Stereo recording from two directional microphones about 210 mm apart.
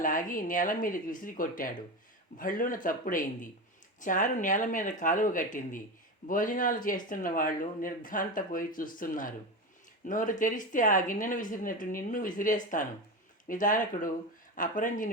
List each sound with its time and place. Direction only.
0.0 s speech: 40° left (ahead or behind)